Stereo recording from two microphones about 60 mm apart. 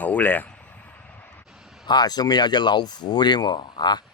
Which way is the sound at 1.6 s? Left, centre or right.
Centre.